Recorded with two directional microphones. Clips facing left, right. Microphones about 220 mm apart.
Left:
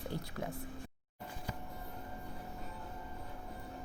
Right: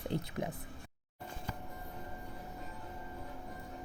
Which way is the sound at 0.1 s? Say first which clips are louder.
Right 5 dB; 20° right (ahead or behind).